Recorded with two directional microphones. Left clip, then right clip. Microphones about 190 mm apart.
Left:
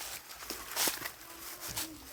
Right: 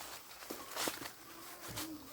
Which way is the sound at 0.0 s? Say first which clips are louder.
Left 5 dB; 60° left (ahead or behind).